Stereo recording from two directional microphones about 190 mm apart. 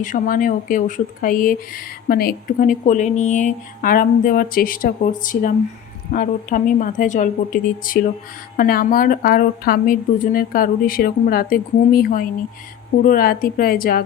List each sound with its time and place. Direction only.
0.0 s speech: 45° left (ahead or behind)